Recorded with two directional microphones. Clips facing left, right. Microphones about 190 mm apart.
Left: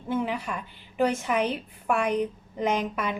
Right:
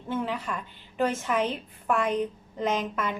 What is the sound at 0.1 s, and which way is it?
A woman's voice, 10° left (ahead or behind).